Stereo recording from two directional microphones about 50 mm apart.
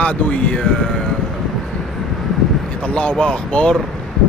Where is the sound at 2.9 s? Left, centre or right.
Left.